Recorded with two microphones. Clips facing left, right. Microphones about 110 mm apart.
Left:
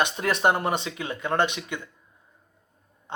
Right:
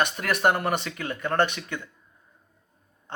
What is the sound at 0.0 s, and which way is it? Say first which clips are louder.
A man's voice: even; 20° left (ahead or behind).